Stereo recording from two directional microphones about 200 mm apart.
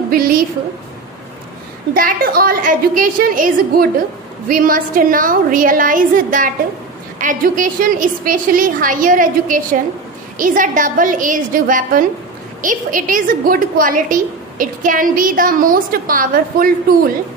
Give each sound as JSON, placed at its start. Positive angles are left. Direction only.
{"t": 0.1, "sound": "a woman's voice", "side_deg": -50}
{"t": 2.0, "sound": "a woman's voice", "side_deg": -45}